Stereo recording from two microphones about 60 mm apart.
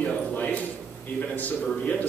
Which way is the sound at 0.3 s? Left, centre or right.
Left.